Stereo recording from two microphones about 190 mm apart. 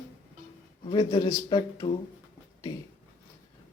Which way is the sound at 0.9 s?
25° left (ahead or behind).